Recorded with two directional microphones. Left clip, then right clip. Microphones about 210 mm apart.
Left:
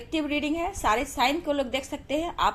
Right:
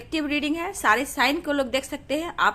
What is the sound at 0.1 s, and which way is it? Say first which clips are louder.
A woman's voice: right 2 dB; 30° right (ahead or behind).